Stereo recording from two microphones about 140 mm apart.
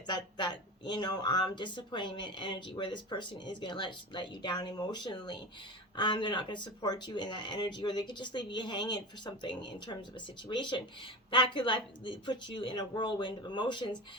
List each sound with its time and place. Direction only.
0.1 s speech: 30° left (ahead or behind)